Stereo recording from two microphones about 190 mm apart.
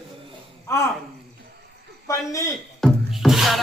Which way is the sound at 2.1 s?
15° left (ahead or behind).